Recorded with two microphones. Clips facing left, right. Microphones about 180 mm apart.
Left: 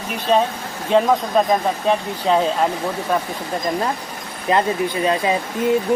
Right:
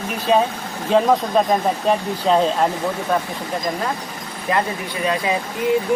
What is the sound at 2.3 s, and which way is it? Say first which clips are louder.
Speech: right 1 dB; centre (ahead or behind).